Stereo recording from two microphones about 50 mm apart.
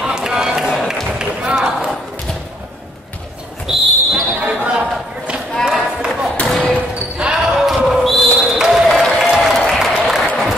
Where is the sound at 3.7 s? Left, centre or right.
Centre.